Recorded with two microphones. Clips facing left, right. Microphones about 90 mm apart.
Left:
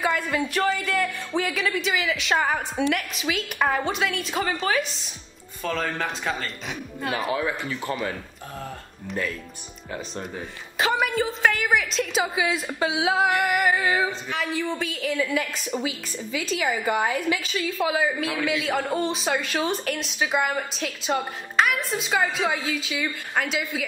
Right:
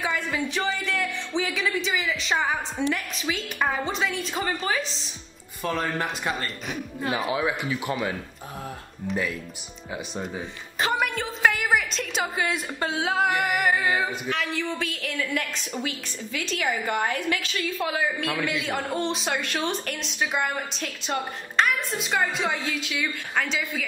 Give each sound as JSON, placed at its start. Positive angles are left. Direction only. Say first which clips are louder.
{"t": 0.0, "sound": "a woman's voice", "louder": "left 3 dB", "side_deg": 0}
{"t": 5.6, "sound": "speech", "louder": "even", "side_deg": -15}
{"t": 6.0, "sound": "a woman's voice", "louder": "even", "side_deg": 0}
{"t": 7.3, "sound": "speech", "louder": "right 1 dB", "side_deg": -15}
{"t": 9.9, "sound": "a woman's voice", "louder": "right 1 dB", "side_deg": -10}